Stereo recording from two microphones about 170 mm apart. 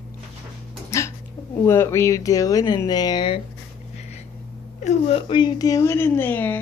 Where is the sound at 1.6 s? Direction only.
15° left (ahead or behind).